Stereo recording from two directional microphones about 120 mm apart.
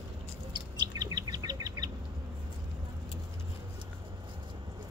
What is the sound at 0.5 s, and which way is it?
Bird, 35° right (ahead or behind).